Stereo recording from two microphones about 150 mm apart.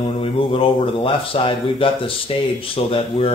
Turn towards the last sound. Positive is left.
turn(degrees=40)  # may be behind; listen again after turning